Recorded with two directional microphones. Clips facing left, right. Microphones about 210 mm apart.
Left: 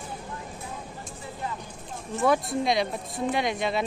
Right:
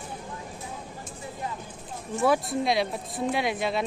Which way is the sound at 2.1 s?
Centre (ahead or behind).